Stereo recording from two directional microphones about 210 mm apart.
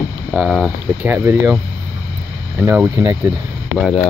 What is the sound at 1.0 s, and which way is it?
Speech, 10° right (ahead or behind).